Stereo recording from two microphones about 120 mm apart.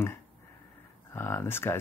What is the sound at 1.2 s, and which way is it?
Speech, 20° left (ahead or behind).